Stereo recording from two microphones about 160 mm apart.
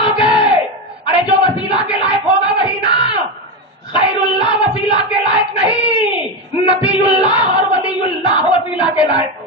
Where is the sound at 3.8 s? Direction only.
30° left (ahead or behind).